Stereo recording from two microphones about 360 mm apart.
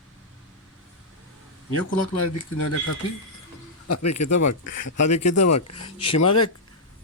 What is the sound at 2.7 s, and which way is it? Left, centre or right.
Speech, left.